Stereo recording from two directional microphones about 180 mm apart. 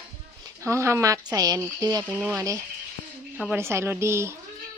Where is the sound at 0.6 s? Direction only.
15° right (ahead or behind).